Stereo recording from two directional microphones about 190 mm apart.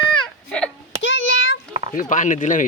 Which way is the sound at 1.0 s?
85° left.